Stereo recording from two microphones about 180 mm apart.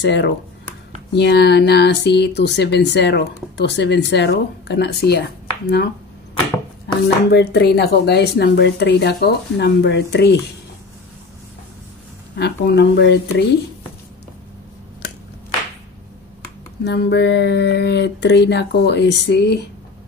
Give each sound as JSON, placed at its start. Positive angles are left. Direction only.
{"t": 0.0, "sound": "speech", "side_deg": 75}
{"t": 7.0, "sound": "speech", "side_deg": 65}
{"t": 12.4, "sound": "speech", "side_deg": 65}
{"t": 16.8, "sound": "speech", "side_deg": 70}